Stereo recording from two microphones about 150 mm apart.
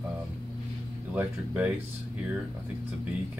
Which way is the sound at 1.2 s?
10° right (ahead or behind).